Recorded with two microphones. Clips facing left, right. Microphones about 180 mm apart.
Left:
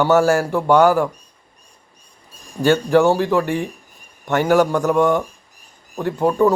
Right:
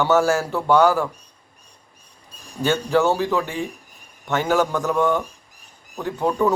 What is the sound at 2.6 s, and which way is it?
Speech, 15° left (ahead or behind).